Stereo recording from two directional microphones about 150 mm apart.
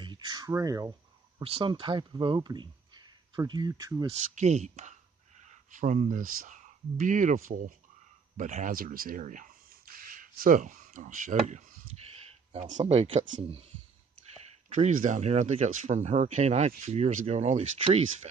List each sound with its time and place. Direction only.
0.0 s a sound: 30° right (ahead or behind)
1.4 s speech: 35° right (ahead or behind)
4.4 s speech: 50° right (ahead or behind)
14.7 s speech: 55° right (ahead or behind)